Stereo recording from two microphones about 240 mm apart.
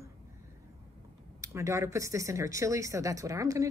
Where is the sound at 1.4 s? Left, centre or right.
Centre.